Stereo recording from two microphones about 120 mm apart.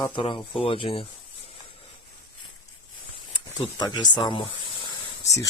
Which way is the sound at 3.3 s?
40° left (ahead or behind).